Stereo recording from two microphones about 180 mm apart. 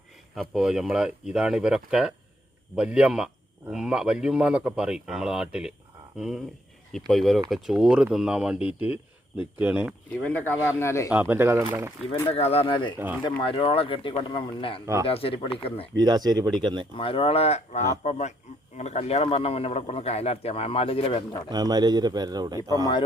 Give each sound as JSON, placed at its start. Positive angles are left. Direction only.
{"t": 0.3, "sound": "speech", "side_deg": 0}
{"t": 10.2, "sound": "speech", "side_deg": 10}
{"t": 11.1, "sound": "speech", "side_deg": -10}
{"t": 12.3, "sound": "speech", "side_deg": 35}
{"t": 16.0, "sound": "a man's voice", "side_deg": -20}
{"t": 16.9, "sound": "speech", "side_deg": 30}
{"t": 21.5, "sound": "a man's voice", "side_deg": -20}
{"t": 22.8, "sound": "speech", "side_deg": 25}